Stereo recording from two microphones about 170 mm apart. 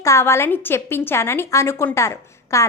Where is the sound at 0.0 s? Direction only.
15° left (ahead or behind).